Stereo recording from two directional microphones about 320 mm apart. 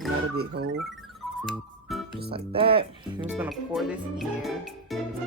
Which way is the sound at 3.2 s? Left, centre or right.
Centre.